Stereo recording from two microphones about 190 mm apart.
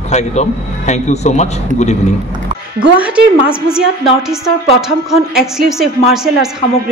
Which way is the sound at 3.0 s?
5° right (ahead or behind).